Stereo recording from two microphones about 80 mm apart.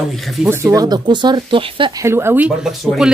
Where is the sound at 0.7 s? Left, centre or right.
Right.